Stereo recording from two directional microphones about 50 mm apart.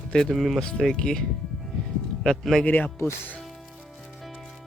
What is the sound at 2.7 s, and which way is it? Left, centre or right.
Speech, left.